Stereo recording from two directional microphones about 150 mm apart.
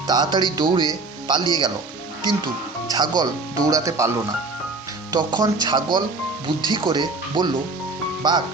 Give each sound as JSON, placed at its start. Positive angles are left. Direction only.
{"t": 0.1, "sound": "speech", "side_deg": -30}
{"t": 2.9, "sound": "speech", "side_deg": -25}
{"t": 5.1, "sound": "speech", "side_deg": -25}